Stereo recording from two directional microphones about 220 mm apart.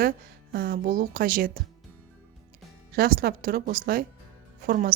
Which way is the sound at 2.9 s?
40° right (ahead or behind).